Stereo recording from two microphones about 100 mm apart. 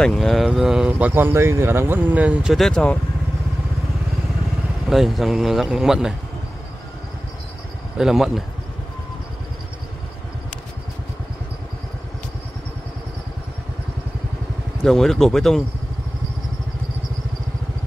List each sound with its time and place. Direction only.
0.0 s speech: 5° left (ahead or behind)
2.5 s speech: 5° left (ahead or behind)
4.8 s speech: centre (ahead or behind)
8.0 s speech: 5° right (ahead or behind)
14.8 s speech: 5° left (ahead or behind)